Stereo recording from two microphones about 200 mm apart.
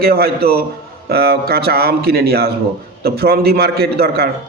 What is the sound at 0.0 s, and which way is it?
A man's voice, 50° right (ahead or behind).